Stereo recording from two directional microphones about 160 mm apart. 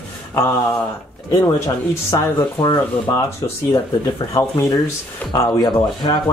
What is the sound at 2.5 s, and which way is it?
Speech, 30° left (ahead or behind).